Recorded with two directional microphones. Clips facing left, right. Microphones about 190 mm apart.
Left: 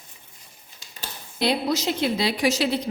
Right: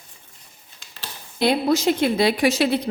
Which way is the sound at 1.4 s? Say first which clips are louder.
Right 4 dB; 50° right (ahead or behind).